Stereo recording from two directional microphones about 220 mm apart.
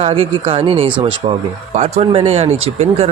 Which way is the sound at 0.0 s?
25° right (ahead or behind).